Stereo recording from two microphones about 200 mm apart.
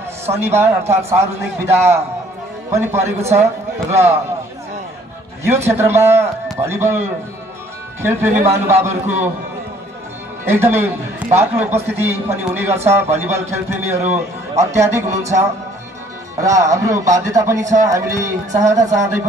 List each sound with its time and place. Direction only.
0.3 s a man's voice: 10° right (ahead or behind)
5.7 s a man's voice: 10° right (ahead or behind)
10.5 s a man's voice: 10° right (ahead or behind)
16.3 s a man's voice: 15° right (ahead or behind)